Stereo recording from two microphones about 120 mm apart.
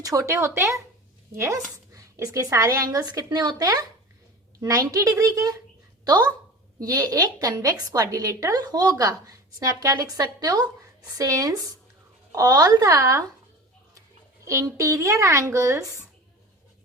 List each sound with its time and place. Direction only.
0.0 s speech: 30° right (ahead or behind)
6.8 s a woman's voice: 30° right (ahead or behind)
14.4 s speech: 25° right (ahead or behind)